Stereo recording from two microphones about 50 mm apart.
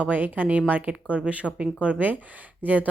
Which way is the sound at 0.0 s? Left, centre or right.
Right.